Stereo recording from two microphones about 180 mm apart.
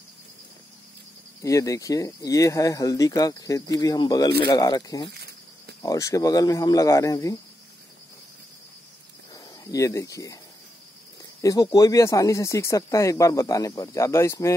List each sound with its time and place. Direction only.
1.4 s speech: 15° left (ahead or behind)
5.1 s cricket: 65° right (ahead or behind)
5.8 s speech: 20° left (ahead or behind)
9.3 s speech: 20° left (ahead or behind)
11.4 s speech: 20° left (ahead or behind)